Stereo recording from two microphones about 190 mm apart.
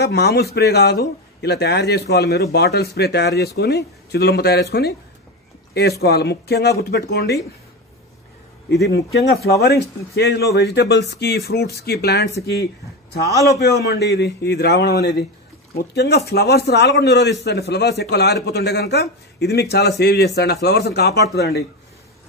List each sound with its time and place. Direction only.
0.0 s a man's voice: 60° left (ahead or behind)
8.6 s a man's voice: 60° left (ahead or behind)